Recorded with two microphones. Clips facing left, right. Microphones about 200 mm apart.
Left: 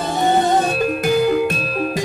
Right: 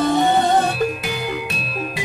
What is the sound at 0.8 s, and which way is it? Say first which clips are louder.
Music: left 9 dB; 45° left (ahead or behind).